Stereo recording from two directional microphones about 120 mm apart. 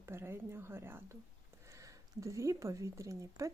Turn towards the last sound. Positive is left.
turn(degrees=-25)  # may be behind; listen again after turning